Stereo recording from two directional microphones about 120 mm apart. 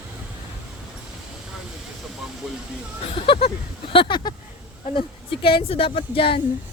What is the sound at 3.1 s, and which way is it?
Speech, 50° left (ahead or behind).